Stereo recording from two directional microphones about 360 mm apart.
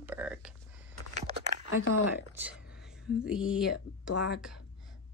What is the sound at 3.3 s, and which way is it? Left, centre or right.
Speech, centre.